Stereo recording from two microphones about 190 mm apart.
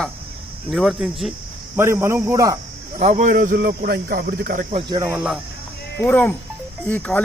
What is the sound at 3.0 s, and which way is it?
Speech, 40° right (ahead or behind).